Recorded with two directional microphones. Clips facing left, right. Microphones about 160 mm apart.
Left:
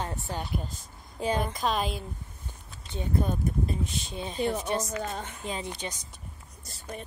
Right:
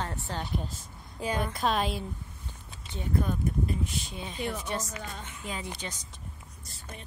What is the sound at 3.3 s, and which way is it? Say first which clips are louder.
Speech: left 1 dB; 25° left (ahead or behind).